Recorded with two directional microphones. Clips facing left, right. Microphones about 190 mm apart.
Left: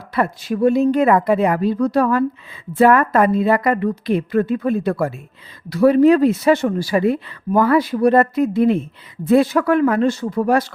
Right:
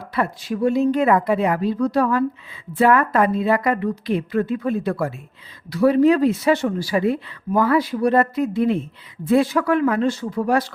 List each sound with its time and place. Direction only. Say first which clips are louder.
0.1 s speech: left 3 dB; 55° left (ahead or behind)